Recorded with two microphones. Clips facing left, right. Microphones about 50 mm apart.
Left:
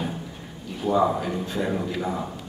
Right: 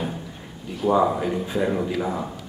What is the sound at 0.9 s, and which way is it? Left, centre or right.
Speech, centre.